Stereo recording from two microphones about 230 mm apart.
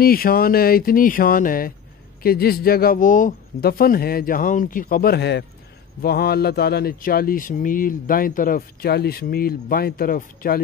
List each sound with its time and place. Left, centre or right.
0.0 s speech: left